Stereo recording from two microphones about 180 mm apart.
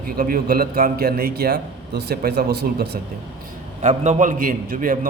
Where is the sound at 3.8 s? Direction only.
40° right (ahead or behind).